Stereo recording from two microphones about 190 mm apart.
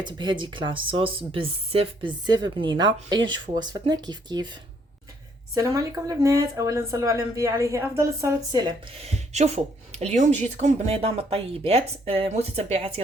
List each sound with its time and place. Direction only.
0.0 s speech: 25° right (ahead or behind)
5.5 s speech: 15° right (ahead or behind)
9.0 s speech: 35° right (ahead or behind)